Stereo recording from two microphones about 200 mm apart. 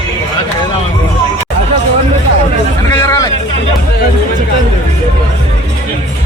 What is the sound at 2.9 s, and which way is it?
Hubbub, 15° left (ahead or behind).